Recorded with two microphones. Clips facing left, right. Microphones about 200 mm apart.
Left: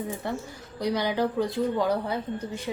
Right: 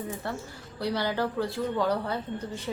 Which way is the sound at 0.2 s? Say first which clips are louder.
Left 3 dB; 15° left (ahead or behind).